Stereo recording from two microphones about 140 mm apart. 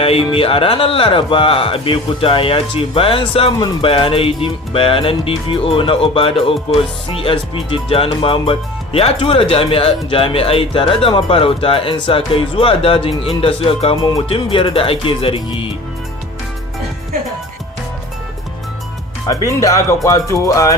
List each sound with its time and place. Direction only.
0.0 s speech: 40° left (ahead or behind)
19.3 s music: 20° left (ahead or behind)